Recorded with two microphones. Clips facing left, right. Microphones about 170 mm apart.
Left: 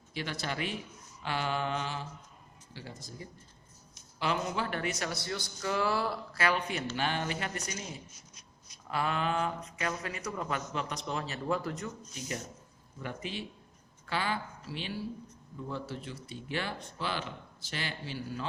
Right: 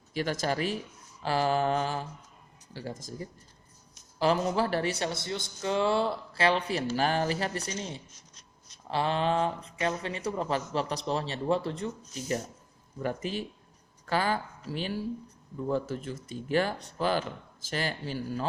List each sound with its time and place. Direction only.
0.1 s speech: 45° right (ahead or behind)
3.2 s speech: 40° right (ahead or behind)
13.0 s speech: 40° right (ahead or behind)